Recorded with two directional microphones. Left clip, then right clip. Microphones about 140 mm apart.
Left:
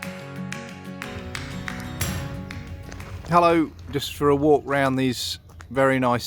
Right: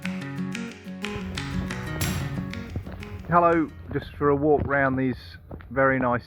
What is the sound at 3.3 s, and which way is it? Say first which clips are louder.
Speech: left 2 dB; 35° left (ahead or behind).